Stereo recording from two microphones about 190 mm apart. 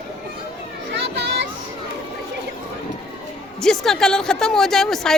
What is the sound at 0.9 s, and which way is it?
Children playing, 65° right (ahead or behind).